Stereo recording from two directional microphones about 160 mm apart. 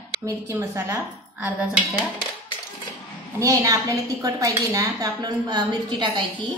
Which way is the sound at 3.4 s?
20° right (ahead or behind).